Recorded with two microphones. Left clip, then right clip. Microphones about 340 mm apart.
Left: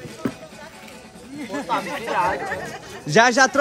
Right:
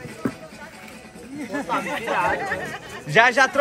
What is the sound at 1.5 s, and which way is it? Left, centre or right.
Speech, centre.